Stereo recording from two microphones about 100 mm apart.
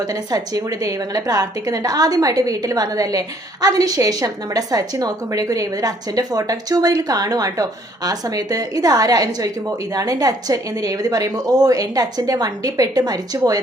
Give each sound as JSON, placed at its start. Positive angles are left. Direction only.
{"t": 0.0, "sound": "a woman's voice", "side_deg": -40}